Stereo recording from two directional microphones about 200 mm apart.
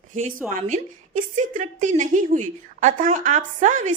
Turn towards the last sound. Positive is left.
turn(degrees=-35)  # may be behind; listen again after turning